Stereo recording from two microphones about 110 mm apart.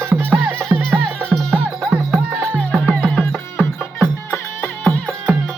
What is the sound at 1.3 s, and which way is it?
Music, 10° left (ahead or behind).